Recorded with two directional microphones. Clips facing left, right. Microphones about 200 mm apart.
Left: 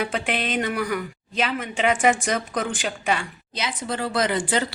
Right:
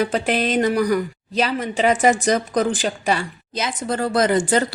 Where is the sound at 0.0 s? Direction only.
40° right (ahead or behind).